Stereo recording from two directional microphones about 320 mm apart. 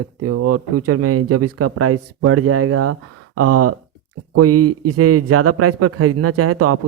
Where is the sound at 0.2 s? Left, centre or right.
Right.